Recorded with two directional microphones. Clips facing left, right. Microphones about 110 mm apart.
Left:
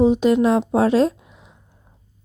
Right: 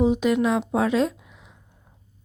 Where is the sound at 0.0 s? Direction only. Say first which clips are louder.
Left 5 dB; 30° left (ahead or behind).